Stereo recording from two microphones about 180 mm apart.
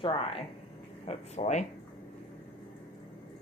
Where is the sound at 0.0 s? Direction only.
30° left (ahead or behind).